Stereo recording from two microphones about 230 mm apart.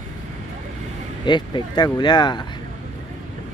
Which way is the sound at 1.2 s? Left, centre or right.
Centre.